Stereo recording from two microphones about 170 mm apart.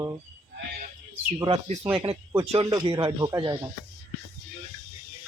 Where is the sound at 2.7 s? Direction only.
25° right (ahead or behind).